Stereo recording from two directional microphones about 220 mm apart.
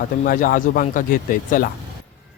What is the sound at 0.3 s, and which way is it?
Speech, 35° left (ahead or behind).